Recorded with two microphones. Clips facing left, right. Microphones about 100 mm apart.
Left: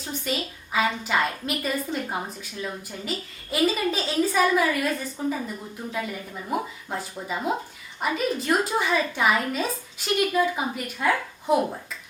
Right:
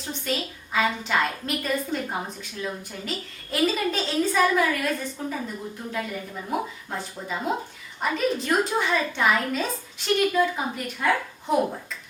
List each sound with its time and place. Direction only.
0.0 s a woman's voice: centre (ahead or behind)
6.5 s a woman's voice: 5° left (ahead or behind)